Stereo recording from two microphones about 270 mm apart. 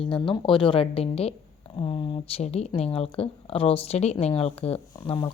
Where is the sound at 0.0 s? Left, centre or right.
Centre.